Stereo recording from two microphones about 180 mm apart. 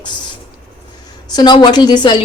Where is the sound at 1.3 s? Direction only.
25° left (ahead or behind).